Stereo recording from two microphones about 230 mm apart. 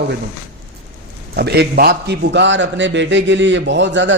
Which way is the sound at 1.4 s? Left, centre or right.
Right.